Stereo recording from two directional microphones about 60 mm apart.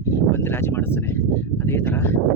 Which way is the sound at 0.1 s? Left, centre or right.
Left.